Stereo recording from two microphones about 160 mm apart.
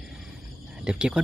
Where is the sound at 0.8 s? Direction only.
5° right (ahead or behind).